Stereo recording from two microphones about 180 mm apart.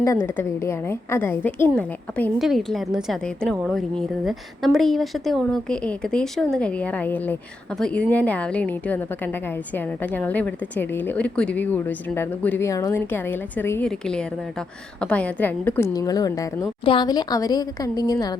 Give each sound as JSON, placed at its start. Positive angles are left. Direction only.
{"t": 0.0, "sound": "a woman's voice", "side_deg": 15}